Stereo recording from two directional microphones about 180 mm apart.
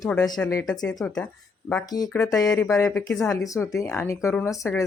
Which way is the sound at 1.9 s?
20° left (ahead or behind).